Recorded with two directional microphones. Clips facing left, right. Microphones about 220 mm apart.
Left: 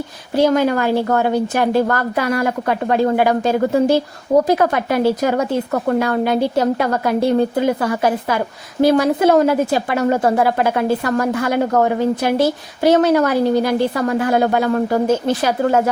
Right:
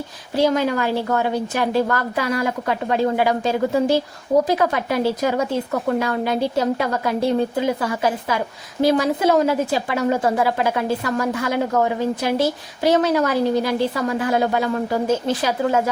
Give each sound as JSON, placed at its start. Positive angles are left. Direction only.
{"t": 0.3, "sound": "a woman's voice", "side_deg": 55}